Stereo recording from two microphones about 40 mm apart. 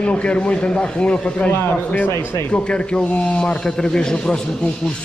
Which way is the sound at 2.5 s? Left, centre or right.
Left.